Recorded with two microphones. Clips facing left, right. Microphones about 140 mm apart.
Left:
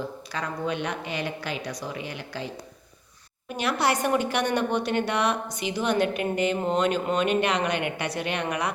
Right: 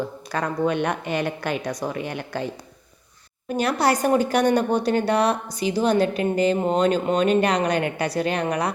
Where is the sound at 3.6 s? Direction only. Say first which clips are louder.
Right 4 dB; 40° right (ahead or behind).